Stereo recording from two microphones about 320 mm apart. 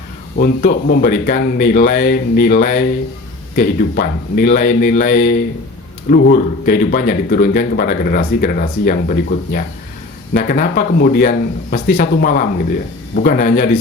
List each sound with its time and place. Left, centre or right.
0.3 s speech: left